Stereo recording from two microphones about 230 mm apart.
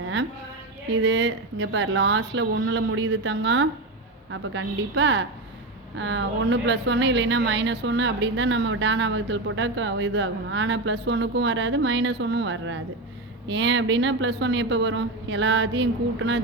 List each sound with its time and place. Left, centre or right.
1.0 s a woman's voice: right